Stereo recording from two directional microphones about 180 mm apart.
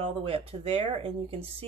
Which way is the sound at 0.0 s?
30° right (ahead or behind).